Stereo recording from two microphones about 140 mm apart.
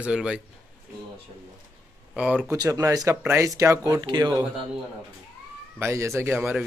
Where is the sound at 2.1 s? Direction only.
5° right (ahead or behind).